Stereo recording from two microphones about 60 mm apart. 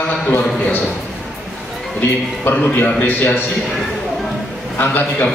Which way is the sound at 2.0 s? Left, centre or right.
Left.